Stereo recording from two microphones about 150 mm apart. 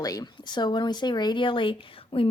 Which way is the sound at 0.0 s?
25° left (ahead or behind).